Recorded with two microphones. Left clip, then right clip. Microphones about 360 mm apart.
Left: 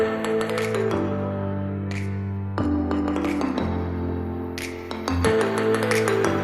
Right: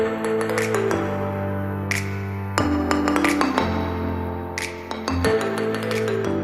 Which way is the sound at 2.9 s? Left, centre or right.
Right.